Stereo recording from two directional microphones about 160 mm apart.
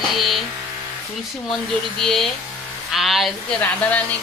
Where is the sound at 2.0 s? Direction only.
Centre (ahead or behind).